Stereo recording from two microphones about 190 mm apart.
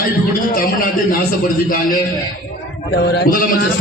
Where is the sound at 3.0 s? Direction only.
60° left (ahead or behind).